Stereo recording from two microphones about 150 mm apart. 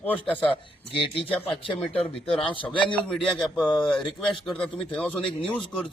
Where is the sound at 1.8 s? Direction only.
Centre (ahead or behind).